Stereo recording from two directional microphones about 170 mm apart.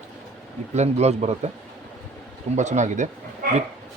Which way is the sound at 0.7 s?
40° right (ahead or behind).